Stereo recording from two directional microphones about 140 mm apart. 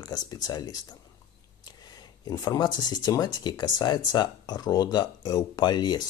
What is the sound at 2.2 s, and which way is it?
Speech, 30° left (ahead or behind).